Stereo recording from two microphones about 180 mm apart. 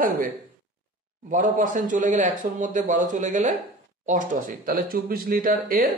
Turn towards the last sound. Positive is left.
turn(degrees=-55)  # may be behind; listen again after turning